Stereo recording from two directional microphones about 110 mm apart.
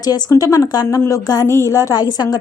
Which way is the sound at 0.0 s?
35° left (ahead or behind).